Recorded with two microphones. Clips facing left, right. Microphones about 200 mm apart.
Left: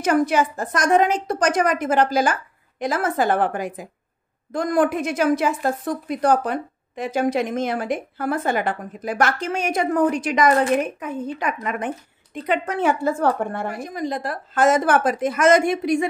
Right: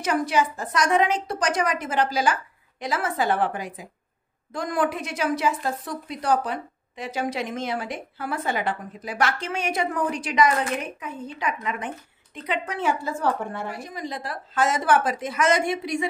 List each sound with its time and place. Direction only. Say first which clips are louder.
0.0 s a woman's voice: left 5 dB; 50° left (ahead or behind)